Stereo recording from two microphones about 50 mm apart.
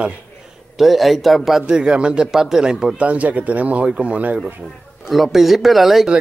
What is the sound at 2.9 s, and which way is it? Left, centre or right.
Speech, right.